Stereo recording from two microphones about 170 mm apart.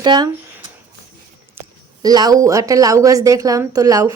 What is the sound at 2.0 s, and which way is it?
A woman's voice, 20° right (ahead or behind).